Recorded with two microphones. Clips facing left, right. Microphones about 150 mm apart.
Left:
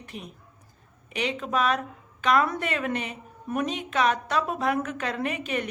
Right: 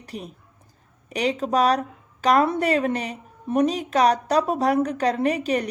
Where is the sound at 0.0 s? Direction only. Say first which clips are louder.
Right 5 dB; 40° right (ahead or behind).